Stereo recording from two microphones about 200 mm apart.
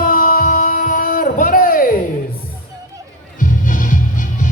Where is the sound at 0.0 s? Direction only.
45° left (ahead or behind).